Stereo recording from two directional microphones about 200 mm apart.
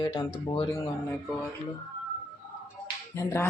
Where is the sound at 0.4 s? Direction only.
25° left (ahead or behind).